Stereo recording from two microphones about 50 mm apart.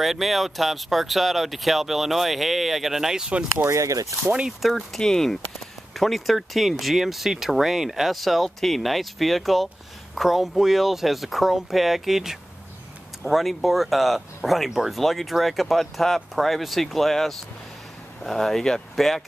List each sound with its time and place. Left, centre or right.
0.0 s speech: centre
3.6 s speech: right
4.5 s speech: centre
4.9 s speech: centre